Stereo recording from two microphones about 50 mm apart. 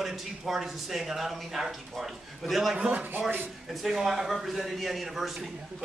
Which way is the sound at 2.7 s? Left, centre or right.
Right.